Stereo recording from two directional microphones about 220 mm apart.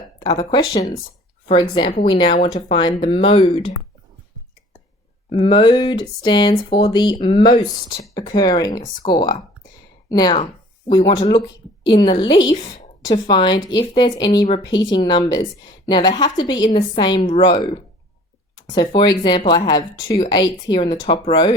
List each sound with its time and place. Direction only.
0.2 s speech: 20° left (ahead or behind)
2.0 s speech: 20° left (ahead or behind)
5.3 s speech: 20° left (ahead or behind)
18.9 s speech: 20° left (ahead or behind)